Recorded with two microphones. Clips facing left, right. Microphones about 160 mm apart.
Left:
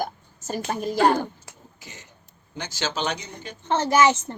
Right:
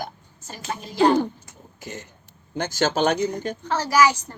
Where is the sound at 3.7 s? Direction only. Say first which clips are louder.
Left 1 dB; 25° left (ahead or behind).